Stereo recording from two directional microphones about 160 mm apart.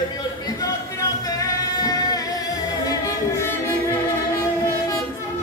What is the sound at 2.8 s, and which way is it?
Singing, 20° left (ahead or behind).